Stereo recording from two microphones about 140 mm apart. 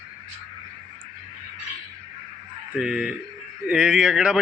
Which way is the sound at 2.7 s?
5° right (ahead or behind).